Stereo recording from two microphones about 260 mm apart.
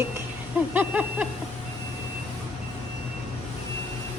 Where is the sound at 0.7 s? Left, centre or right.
Centre.